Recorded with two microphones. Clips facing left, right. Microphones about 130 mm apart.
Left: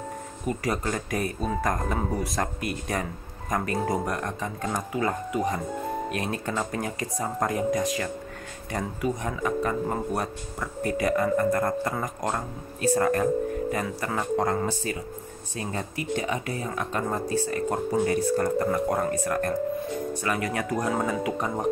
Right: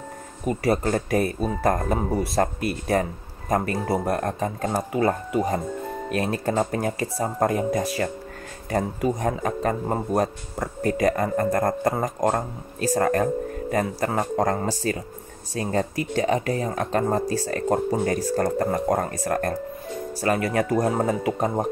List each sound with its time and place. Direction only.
0.5 s speech: 30° right (ahead or behind)
8.7 s speech: 45° right (ahead or behind)